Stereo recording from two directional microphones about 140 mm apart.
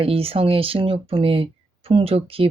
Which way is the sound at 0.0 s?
40° right (ahead or behind).